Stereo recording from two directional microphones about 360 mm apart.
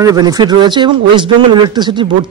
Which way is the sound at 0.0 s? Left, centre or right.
Centre.